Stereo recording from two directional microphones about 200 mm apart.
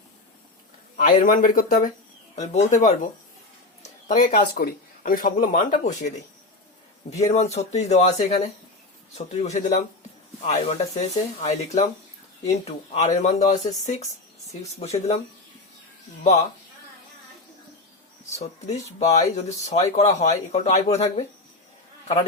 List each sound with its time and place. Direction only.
0.9 s speech: 45° left (ahead or behind)
4.1 s speech: 45° left (ahead or behind)
7.2 s speech: 35° left (ahead or behind)
19.1 s a man's voice: 35° left (ahead or behind)